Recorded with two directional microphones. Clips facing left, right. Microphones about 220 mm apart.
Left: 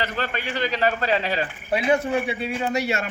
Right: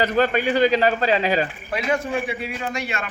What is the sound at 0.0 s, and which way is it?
Speech, 40° right (ahead or behind).